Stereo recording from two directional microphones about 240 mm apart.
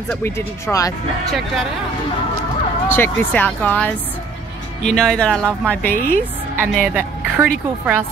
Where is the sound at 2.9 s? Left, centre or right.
Centre.